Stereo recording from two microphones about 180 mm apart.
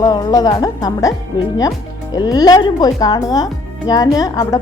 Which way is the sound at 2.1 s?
20° left (ahead or behind).